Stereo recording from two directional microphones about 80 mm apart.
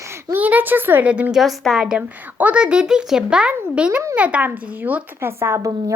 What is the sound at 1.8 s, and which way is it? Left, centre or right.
A child's voice, centre.